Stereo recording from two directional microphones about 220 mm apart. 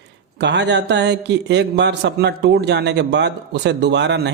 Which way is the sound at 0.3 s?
50° right (ahead or behind).